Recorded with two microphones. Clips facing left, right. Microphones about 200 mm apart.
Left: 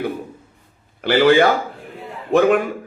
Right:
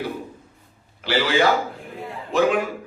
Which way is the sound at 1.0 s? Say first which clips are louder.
Left 7 dB; 55° left (ahead or behind).